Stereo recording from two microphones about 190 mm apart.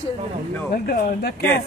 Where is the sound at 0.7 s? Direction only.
50° left (ahead or behind).